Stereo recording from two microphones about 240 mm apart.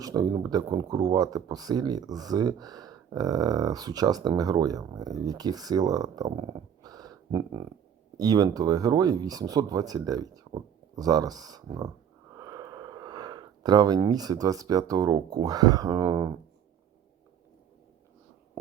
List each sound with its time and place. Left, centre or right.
0.0 s speech: centre